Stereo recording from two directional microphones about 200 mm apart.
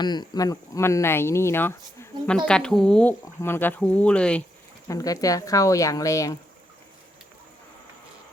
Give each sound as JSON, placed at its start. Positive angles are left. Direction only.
{"t": 0.0, "sound": "speech", "side_deg": 20}
{"t": 4.9, "sound": "speech", "side_deg": 15}